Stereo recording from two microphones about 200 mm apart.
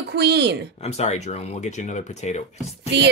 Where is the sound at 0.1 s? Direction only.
55° right (ahead or behind).